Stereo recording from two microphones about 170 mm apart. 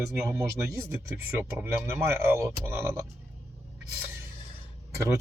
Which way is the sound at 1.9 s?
15° right (ahead or behind).